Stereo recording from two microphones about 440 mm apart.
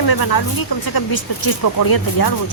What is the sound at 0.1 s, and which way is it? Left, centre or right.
Speech, left.